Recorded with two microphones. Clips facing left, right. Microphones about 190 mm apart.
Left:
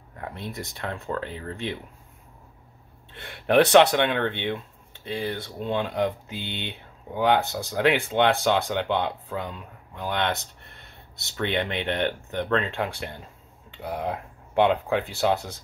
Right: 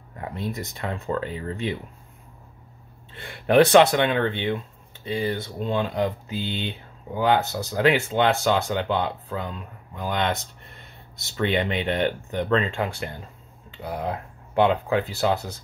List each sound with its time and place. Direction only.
0.5 s speech: centre (ahead or behind)
3.3 s speech: centre (ahead or behind)
6.3 s speech: 60° left (ahead or behind)
6.7 s speech: centre (ahead or behind)